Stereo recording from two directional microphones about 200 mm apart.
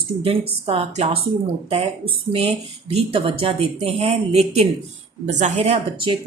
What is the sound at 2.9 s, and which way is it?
Speech, 30° right (ahead or behind).